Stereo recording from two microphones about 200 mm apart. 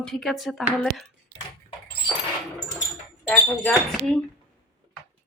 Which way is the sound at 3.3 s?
5° left (ahead or behind).